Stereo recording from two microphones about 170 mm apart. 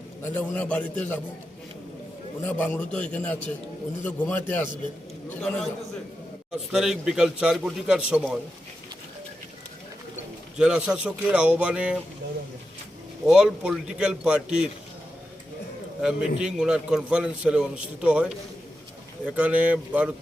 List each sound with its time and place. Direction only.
0.2 s a man's voice: 10° left (ahead or behind)
2.4 s a man's voice: 10° left (ahead or behind)
10.6 s a man's voice: 5° right (ahead or behind)
13.2 s a man's voice: 5° right (ahead or behind)
16.0 s a man's voice: 5° right (ahead or behind)